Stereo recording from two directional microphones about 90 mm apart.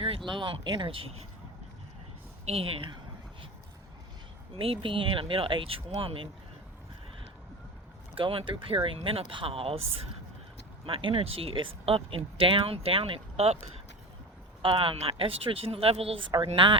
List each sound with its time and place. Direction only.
0.3 s speech: 65° right (ahead or behind)
2.6 s speech: 90° right
4.5 s speech: 80° right
8.1 s speech: 90° right
14.6 s speech: 90° right
16.4 s speech: 65° right (ahead or behind)